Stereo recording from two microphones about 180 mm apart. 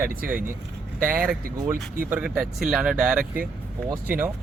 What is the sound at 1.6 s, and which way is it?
Speech, 20° right (ahead or behind).